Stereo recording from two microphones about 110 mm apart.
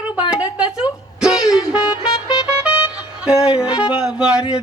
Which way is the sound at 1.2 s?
5° right (ahead or behind).